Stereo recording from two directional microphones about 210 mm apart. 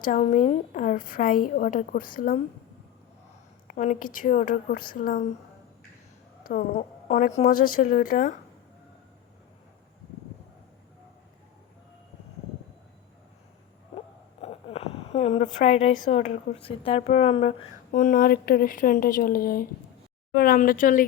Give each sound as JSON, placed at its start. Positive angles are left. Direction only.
{"t": 0.0, "sound": "a woman's voice", "side_deg": 35}
{"t": 3.7, "sound": "a woman's voice", "side_deg": 40}
{"t": 6.4, "sound": "a woman's voice", "side_deg": 40}
{"t": 14.4, "sound": "a woman's voice", "side_deg": 30}
{"t": 17.9, "sound": "a woman's voice", "side_deg": 40}